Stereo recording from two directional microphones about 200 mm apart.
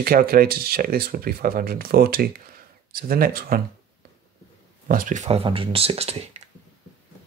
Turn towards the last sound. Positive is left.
turn(degrees=-30)  # may be behind; listen again after turning